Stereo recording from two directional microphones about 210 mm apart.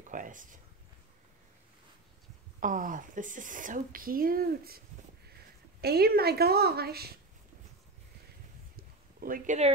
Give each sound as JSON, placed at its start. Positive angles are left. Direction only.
{"t": 0.0, "sound": "speech", "side_deg": -40}
{"t": 2.6, "sound": "a woman's voice", "side_deg": -40}
{"t": 8.7, "sound": "a sound", "side_deg": -40}